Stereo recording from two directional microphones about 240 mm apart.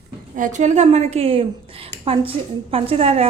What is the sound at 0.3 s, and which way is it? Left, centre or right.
A woman's voice, right.